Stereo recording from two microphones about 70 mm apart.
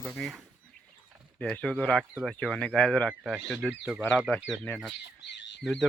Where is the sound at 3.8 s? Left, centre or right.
Centre.